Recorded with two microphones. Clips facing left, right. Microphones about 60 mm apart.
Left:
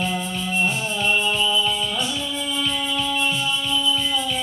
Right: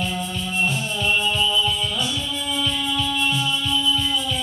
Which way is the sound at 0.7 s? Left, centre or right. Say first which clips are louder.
Left 1 dB; centre.